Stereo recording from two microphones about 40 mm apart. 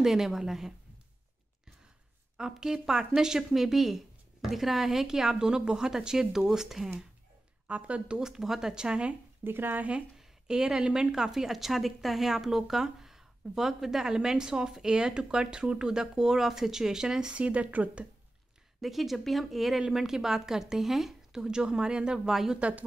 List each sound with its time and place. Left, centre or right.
0.0 s speech: centre
2.6 s speech: centre
7.6 s speech: right
8.2 s speech: centre
9.4 s speech: right
10.1 s speech: centre
17.3 s speech: right
18.8 s speech: centre
22.6 s speech: right